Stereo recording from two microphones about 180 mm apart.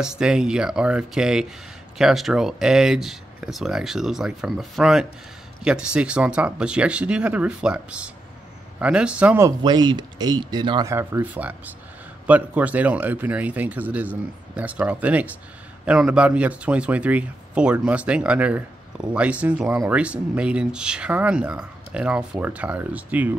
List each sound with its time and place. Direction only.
0.0 s speech: 5° right (ahead or behind)
9.6 s speech: 25° right (ahead or behind); by 23.3 s 10° right (ahead or behind)